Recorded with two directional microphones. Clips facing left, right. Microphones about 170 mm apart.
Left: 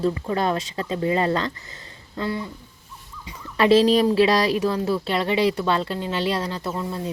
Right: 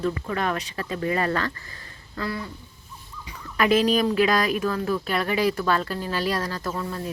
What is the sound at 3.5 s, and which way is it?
Speech, 30° left (ahead or behind).